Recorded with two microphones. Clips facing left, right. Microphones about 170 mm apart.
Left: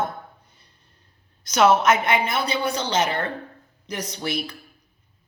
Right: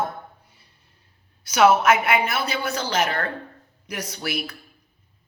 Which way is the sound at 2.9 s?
25° left (ahead or behind).